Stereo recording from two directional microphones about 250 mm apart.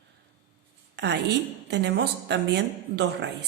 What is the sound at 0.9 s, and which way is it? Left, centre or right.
A woman's voice, right.